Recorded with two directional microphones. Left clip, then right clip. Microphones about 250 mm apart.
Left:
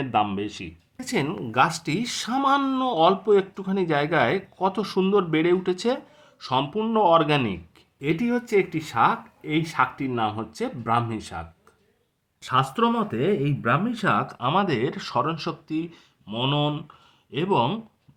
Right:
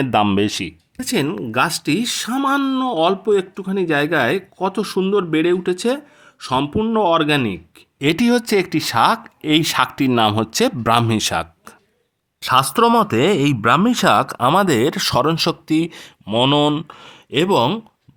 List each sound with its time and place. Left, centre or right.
0.0 s speech: right
0.9 s speech: right
7.9 s speech: right